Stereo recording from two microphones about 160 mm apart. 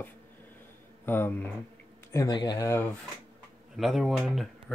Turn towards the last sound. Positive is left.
turn(degrees=0)  # may be behind; listen again after turning